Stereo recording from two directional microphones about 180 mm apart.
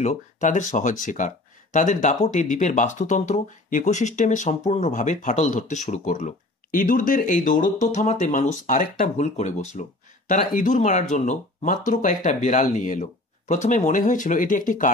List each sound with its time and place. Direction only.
0.0 s speech: 40° left (ahead or behind)